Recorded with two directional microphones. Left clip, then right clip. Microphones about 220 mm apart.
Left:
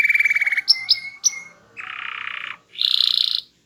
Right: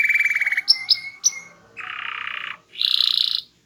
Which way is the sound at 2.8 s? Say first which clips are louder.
Left 1 dB; centre (ahead or behind).